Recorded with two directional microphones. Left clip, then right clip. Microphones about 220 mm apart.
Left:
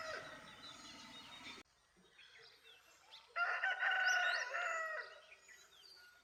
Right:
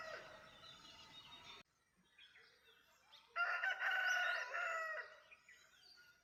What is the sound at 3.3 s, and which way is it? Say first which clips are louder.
Chicken: left 2 dB; 45° right (ahead or behind).